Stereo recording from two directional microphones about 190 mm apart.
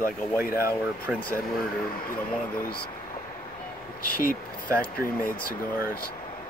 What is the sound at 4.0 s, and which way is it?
Speech, 50° left (ahead or behind).